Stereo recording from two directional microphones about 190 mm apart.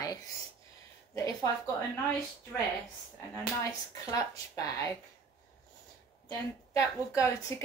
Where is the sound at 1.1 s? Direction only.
15° left (ahead or behind).